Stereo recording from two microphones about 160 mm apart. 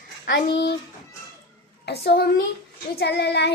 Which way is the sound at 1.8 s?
90° left.